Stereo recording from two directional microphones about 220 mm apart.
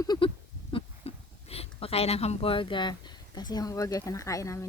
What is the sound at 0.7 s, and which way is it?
Speech, 25° left (ahead or behind).